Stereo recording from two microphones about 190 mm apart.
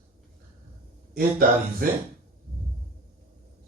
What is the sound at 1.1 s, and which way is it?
Speech, 50° right (ahead or behind).